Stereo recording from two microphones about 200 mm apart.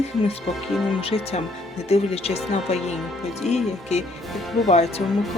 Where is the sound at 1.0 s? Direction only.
30° left (ahead or behind).